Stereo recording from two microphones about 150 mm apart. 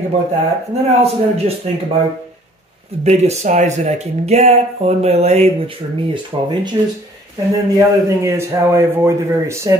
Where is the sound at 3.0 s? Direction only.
45° right (ahead or behind).